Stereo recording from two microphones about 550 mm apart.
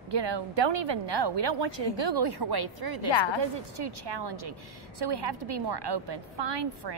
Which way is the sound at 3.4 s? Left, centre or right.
Right.